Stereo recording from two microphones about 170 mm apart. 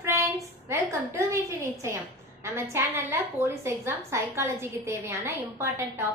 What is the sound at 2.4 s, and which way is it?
A woman's voice, 15° right (ahead or behind).